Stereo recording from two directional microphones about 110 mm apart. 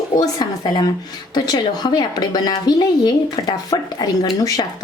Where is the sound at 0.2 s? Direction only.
40° left (ahead or behind).